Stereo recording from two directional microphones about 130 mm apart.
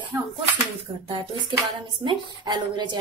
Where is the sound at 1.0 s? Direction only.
40° right (ahead or behind).